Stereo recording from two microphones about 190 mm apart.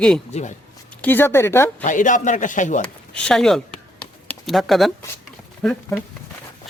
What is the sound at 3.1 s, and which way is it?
Speech, 5° left (ahead or behind).